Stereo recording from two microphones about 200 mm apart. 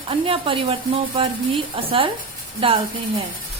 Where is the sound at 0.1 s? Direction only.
25° right (ahead or behind).